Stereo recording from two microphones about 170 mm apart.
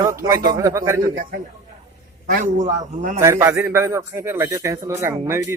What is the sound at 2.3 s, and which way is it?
Speech, 50° right (ahead or behind).